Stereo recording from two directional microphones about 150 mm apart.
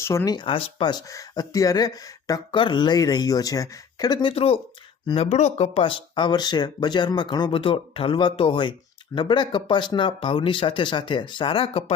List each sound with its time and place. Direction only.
0.0 s speech: 20° left (ahead or behind)
0.3 s speech: 35° left (ahead or behind)